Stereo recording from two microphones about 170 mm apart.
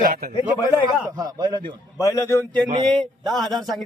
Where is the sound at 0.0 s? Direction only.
55° right (ahead or behind).